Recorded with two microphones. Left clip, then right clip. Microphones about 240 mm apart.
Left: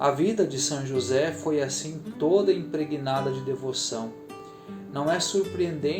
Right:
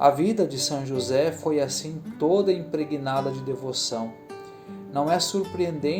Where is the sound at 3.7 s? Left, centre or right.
Centre.